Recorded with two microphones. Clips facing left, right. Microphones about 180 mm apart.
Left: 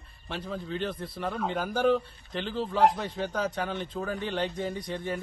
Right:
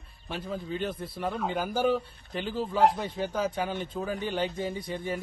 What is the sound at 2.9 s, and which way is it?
Speech, 55° left (ahead or behind).